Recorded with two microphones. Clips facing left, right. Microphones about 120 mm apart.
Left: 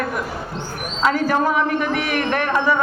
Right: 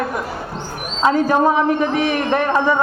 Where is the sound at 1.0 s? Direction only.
20° right (ahead or behind).